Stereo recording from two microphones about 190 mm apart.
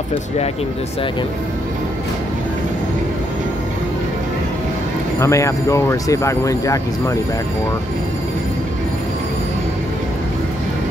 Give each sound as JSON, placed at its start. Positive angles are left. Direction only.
{"t": 5.2, "sound": "speech", "side_deg": 15}